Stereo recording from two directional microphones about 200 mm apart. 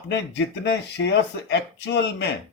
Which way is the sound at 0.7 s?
60° left (ahead or behind).